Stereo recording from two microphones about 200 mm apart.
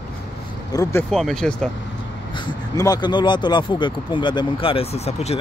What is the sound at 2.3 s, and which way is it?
Speech, 20° left (ahead or behind).